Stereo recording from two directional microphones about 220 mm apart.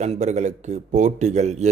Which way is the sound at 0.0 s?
30° right (ahead or behind).